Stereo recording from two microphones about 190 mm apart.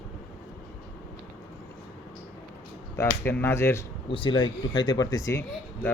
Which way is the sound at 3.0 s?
10° left (ahead or behind).